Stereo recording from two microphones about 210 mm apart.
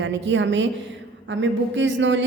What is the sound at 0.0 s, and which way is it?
Speech, 60° right (ahead or behind).